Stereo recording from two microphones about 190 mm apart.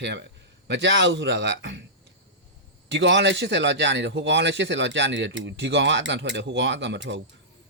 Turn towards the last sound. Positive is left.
turn(degrees=-65)  # may be behind; listen again after turning